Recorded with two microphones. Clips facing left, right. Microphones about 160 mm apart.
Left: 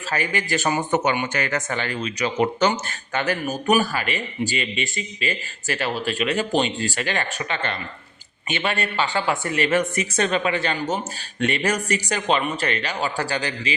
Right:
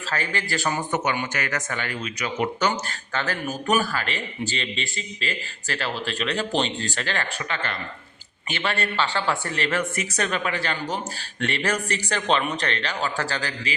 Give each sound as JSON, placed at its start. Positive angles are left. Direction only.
{"t": 0.1, "sound": "a woman's voice", "side_deg": 15}